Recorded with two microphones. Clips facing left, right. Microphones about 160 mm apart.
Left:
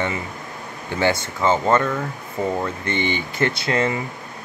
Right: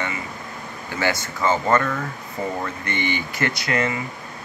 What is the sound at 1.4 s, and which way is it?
Speech, 20° left (ahead or behind).